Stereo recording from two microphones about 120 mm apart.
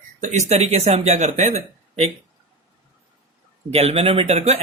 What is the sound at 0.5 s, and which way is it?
Speech, 60° right (ahead or behind).